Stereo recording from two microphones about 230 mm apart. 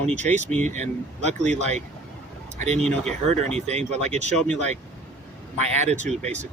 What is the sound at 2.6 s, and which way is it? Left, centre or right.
Speech, right.